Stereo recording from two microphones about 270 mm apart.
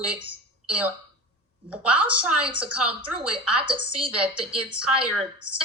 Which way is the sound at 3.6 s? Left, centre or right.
Centre.